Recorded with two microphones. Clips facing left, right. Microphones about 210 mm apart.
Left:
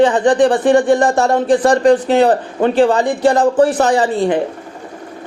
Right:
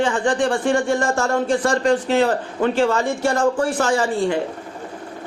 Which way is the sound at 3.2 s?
35° left (ahead or behind).